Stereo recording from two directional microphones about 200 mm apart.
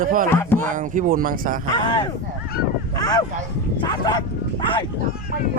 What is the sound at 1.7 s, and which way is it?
Speech, 20° left (ahead or behind).